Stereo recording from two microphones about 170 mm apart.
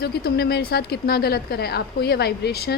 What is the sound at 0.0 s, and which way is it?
A woman's voice, 70° left (ahead or behind).